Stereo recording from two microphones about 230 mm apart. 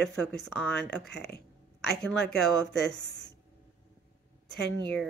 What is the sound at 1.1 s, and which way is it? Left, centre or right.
Speech, left.